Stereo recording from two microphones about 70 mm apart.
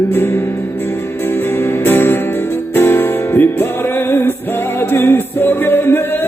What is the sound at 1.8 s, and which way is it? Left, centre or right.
Music, left.